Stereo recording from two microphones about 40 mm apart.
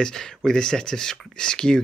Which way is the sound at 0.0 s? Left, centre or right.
Centre.